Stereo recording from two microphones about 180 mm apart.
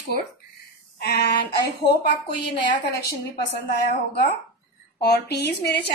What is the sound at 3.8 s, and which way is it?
A woman's voice, 60° left (ahead or behind).